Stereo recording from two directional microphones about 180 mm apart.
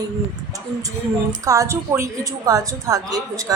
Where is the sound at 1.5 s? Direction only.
15° right (ahead or behind).